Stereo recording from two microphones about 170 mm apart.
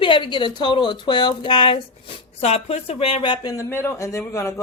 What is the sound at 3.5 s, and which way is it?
A man's voice, 15° left (ahead or behind).